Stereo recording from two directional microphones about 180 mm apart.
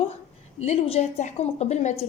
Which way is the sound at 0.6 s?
35° left (ahead or behind).